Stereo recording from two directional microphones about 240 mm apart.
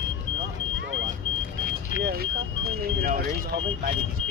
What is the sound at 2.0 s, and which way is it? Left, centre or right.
Vehicle, right.